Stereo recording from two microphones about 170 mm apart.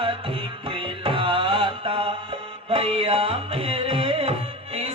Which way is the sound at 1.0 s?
30° right (ahead or behind).